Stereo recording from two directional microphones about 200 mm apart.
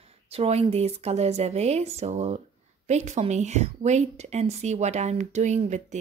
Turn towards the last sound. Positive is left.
turn(degrees=-35)  # may be behind; listen again after turning